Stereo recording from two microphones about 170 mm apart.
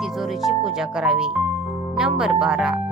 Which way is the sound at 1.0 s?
5° right (ahead or behind).